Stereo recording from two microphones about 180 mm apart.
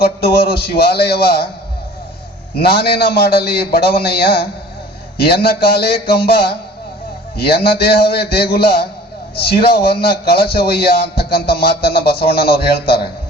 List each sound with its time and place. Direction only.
0.3 s a man's voice: 60° left (ahead or behind)
2.6 s a man's voice: 60° left (ahead or behind)